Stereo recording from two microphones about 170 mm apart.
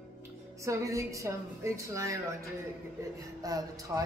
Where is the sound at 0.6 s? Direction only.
15° right (ahead or behind).